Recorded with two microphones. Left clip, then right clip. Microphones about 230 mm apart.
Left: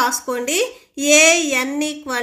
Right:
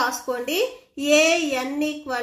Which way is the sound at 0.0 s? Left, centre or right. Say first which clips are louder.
Left 5 dB; left.